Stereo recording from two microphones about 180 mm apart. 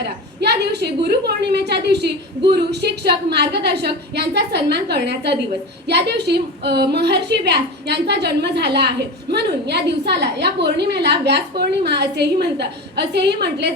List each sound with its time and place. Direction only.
0.0 s a woman's voice: 65° right (ahead or behind)